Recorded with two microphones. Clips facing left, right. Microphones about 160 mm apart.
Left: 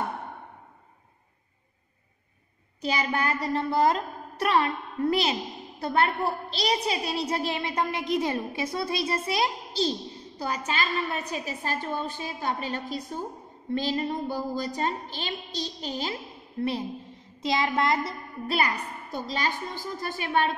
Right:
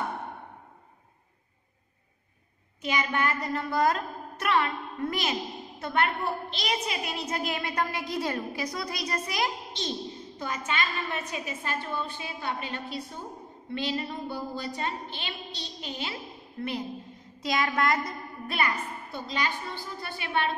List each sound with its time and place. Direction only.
2.8 s a woman's voice: 35° left (ahead or behind)
19.1 s a woman's voice: 40° left (ahead or behind)